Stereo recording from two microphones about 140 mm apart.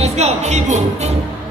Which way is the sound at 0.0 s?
50° right (ahead or behind).